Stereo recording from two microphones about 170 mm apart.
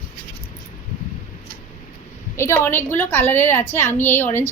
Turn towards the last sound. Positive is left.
turn(degrees=15)  # may be behind; listen again after turning